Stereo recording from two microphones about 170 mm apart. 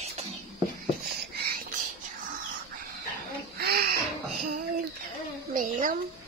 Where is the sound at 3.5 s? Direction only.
65° right (ahead or behind).